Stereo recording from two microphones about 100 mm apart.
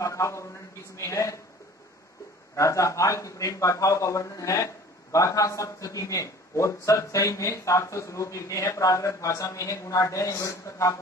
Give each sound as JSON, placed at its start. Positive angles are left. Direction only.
{"t": 0.0, "sound": "a man's voice", "side_deg": 30}
{"t": 2.5, "sound": "a man's voice", "side_deg": 30}